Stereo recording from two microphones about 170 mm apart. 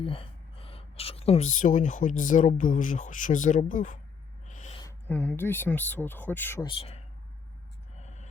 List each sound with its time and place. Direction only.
0.0 s speech: 30° left (ahead or behind); by 4.0 s 50° left (ahead or behind)
4.4 s owl: 45° left (ahead or behind)
4.8 s speech: 15° left (ahead or behind)
6.7 s speech: 35° left (ahead or behind)
7.9 s a sound: 45° left (ahead or behind)